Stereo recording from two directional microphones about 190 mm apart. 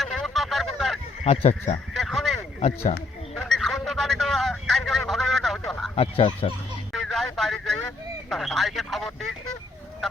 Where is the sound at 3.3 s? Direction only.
Centre (ahead or behind).